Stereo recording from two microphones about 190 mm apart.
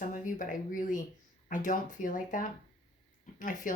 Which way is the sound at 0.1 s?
45° left (ahead or behind).